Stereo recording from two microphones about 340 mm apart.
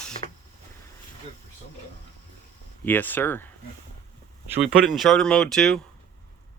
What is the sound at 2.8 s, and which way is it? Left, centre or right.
Speech, centre.